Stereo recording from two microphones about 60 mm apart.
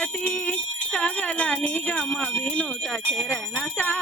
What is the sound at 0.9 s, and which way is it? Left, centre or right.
Jingle bell, left.